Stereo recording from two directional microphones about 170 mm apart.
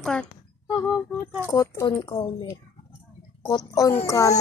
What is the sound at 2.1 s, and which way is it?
Speech, 25° left (ahead or behind).